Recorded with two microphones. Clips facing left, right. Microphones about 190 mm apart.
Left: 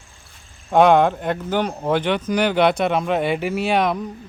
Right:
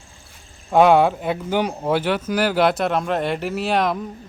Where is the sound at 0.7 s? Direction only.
Centre (ahead or behind).